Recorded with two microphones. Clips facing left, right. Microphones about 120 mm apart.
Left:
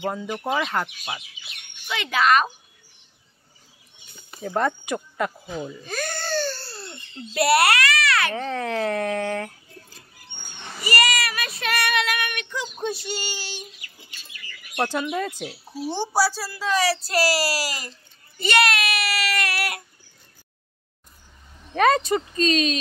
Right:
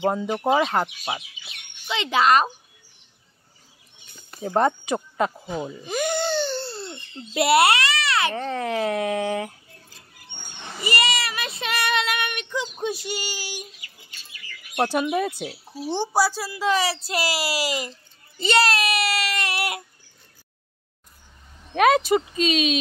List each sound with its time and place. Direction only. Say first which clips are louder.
0.0 s child singing: right 5 dB; 25° right (ahead or behind)
4.4 s speech: right 3 dB; 25° right (ahead or behind)
8.4 s speech: right 1 dB; 5° right (ahead or behind)
10.8 s child singing: left 1 dB; 25° right (ahead or behind)
14.8 s speech: right 3 dB; 15° right (ahead or behind)
15.4 s child singing: left 1 dB; 15° right (ahead or behind)
21.7 s speech: right 1 dB; 5° right (ahead or behind)